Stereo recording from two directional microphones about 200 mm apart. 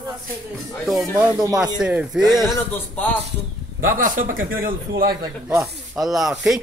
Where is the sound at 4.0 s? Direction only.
45° right (ahead or behind).